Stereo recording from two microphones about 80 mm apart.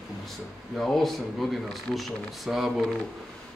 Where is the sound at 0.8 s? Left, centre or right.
Centre.